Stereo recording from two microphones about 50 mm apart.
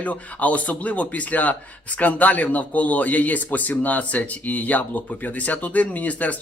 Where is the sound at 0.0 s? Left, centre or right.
Left.